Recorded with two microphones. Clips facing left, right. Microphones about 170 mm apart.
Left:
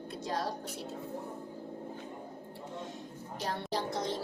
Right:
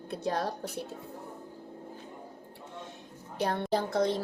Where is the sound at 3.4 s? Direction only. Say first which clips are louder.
Right 6 dB; 60° right (ahead or behind).